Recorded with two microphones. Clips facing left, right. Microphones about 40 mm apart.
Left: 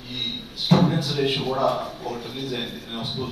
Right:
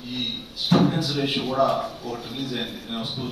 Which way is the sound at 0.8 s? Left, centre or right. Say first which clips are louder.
Left 1 dB; left.